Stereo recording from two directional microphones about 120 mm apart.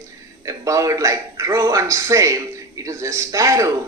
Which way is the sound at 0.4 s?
25° right (ahead or behind).